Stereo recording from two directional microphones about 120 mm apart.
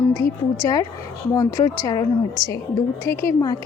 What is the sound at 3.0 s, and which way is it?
Speech, 25° left (ahead or behind).